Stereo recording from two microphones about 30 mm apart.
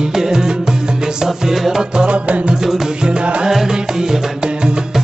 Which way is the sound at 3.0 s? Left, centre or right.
Right.